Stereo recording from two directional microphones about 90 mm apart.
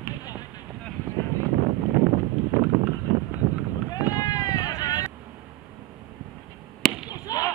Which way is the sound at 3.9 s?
40° left (ahead or behind).